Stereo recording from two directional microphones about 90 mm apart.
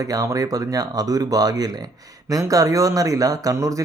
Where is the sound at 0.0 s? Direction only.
40° right (ahead or behind).